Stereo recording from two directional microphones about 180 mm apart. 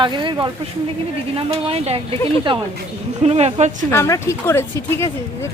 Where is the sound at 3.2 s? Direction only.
35° right (ahead or behind).